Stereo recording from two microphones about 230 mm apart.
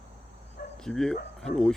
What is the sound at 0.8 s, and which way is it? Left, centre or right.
Speech, centre.